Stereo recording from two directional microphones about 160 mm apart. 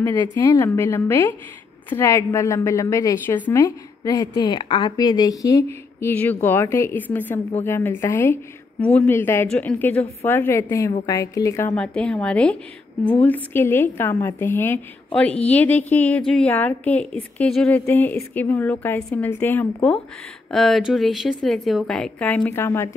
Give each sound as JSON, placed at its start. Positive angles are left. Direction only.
{"t": 0.4, "sound": "a woman's voice", "side_deg": 20}
{"t": 3.6, "sound": "a woman's voice", "side_deg": 20}
{"t": 11.7, "sound": "a woman's voice", "side_deg": 5}